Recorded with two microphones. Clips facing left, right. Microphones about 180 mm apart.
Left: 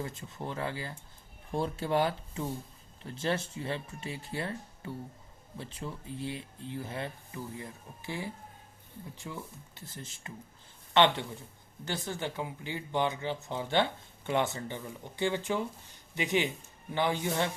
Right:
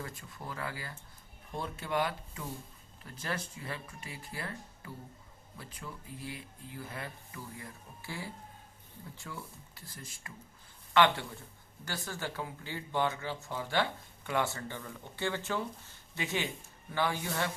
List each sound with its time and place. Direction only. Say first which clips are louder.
0.0 s speech: left 5 dB; 25° left (ahead or behind)